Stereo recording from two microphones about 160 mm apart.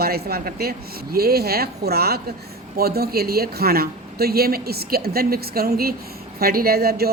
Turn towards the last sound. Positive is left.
turn(degrees=-75)  # may be behind; listen again after turning